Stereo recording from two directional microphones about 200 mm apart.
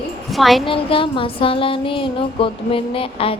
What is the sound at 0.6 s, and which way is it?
Music, 25° left (ahead or behind).